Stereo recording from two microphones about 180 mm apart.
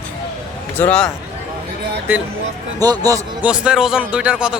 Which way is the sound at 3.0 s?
20° right (ahead or behind).